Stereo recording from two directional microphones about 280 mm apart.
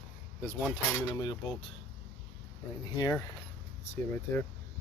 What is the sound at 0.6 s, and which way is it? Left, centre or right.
Speech, centre.